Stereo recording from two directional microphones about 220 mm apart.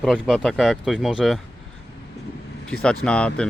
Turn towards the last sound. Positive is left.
turn(degrees=5)  # may be behind; listen again after turning